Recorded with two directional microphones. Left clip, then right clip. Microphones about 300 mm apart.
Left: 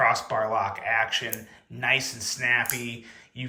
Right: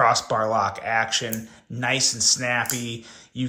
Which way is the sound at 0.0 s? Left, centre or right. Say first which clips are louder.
Right 3 dB; centre.